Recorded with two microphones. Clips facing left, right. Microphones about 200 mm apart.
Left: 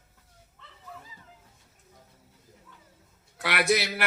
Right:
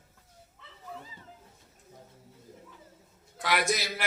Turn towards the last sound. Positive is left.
turn(degrees=65)  # may be behind; listen again after turning